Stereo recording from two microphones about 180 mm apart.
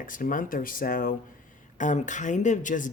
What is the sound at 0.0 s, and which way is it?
Speech, 50° left (ahead or behind).